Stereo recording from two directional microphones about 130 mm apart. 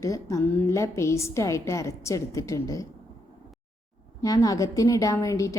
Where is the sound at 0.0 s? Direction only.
25° left (ahead or behind).